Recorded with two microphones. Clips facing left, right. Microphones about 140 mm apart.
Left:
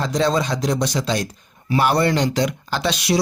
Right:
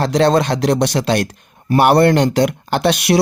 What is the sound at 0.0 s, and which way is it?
Speech, 70° right (ahead or behind).